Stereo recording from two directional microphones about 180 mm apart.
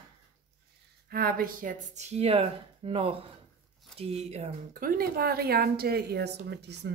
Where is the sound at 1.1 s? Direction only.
55° right (ahead or behind); by 4.5 s 35° right (ahead or behind).